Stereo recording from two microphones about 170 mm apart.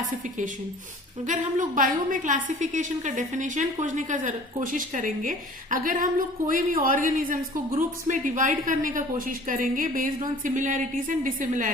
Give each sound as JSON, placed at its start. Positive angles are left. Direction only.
{"t": 1.3, "sound": "a woman's voice", "side_deg": -50}